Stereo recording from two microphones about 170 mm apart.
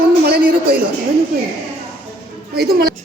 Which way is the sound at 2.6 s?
65° right (ahead or behind).